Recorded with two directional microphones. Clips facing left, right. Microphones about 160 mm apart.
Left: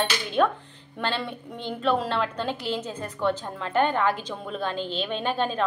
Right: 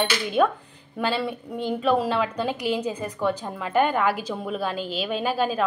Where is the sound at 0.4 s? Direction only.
5° right (ahead or behind).